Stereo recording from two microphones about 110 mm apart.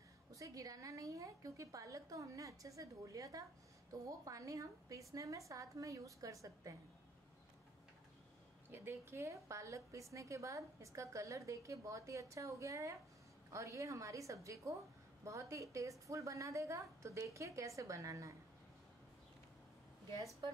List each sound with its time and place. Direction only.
0.3 s a woman's voice: 30° right (ahead or behind)
8.6 s a woman's voice: 20° right (ahead or behind)